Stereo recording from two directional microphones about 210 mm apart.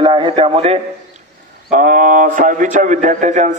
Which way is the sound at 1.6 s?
40° right (ahead or behind).